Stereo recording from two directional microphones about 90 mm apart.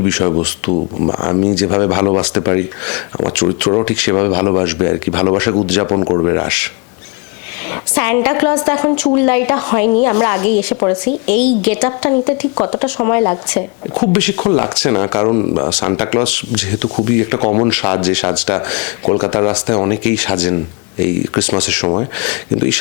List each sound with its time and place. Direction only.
0.0 s speech: 20° left (ahead or behind)
5.8 s speech: 25° left (ahead or behind)
7.7 s a woman's voice: 15° left (ahead or behind)
16.6 s speech: 10° left (ahead or behind)